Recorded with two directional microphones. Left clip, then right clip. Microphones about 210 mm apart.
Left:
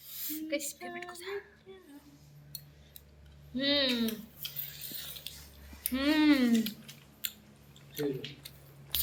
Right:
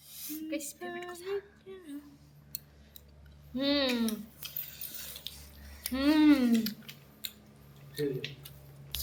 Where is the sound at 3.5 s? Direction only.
20° right (ahead or behind).